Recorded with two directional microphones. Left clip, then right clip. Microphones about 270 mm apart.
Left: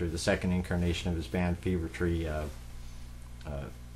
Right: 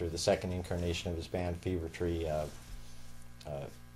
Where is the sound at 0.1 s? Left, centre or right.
Left.